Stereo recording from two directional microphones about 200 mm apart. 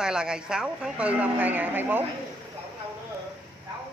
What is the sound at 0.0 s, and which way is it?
Speech, 5° right (ahead or behind).